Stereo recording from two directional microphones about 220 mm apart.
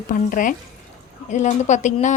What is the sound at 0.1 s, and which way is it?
A woman's voice, 35° left (ahead or behind).